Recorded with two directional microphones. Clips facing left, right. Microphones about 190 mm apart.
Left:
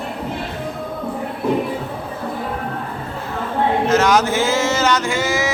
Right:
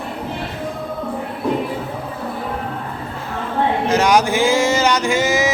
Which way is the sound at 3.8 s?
15° right (ahead or behind).